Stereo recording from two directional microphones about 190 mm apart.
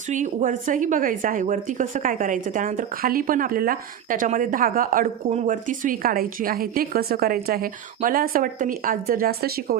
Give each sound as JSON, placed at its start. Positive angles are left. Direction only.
{"t": 0.1, "sound": "a woman's voice", "side_deg": -40}